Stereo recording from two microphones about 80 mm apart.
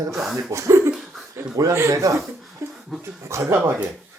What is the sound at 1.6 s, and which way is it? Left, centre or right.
Speech, right.